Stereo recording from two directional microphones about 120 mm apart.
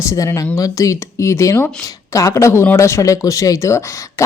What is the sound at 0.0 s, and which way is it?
Speech, 25° left (ahead or behind).